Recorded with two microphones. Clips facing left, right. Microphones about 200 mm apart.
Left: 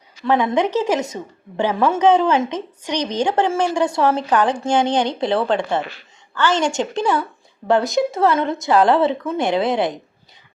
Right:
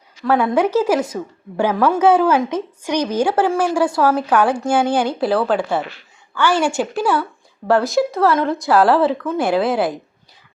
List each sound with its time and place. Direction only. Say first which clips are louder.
0.5 s a woman's voice: right 2 dB; 5° right (ahead or behind)